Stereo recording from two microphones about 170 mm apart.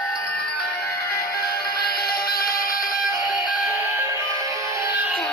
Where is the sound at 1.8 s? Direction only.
65° left (ahead or behind).